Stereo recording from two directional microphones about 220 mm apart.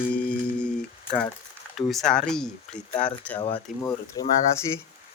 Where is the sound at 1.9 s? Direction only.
Centre (ahead or behind).